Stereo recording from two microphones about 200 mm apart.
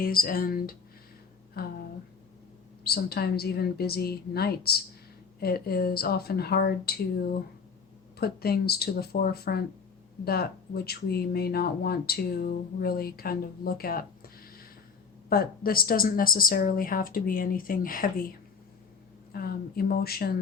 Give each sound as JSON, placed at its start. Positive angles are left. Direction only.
{"t": 0.0, "sound": "speech", "side_deg": 45}
{"t": 2.8, "sound": "speech", "side_deg": 50}
{"t": 8.2, "sound": "speech", "side_deg": 50}
{"t": 10.8, "sound": "speech", "side_deg": 50}
{"t": 15.3, "sound": "speech", "side_deg": 45}
{"t": 19.3, "sound": "speech", "side_deg": 50}